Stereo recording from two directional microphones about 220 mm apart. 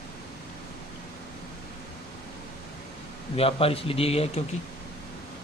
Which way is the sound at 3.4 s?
25° left (ahead or behind).